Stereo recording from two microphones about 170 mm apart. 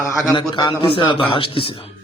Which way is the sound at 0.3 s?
25° left (ahead or behind).